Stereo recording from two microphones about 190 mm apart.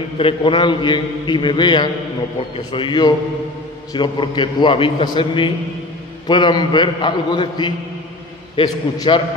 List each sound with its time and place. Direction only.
0.2 s a man's voice: 30° left (ahead or behind)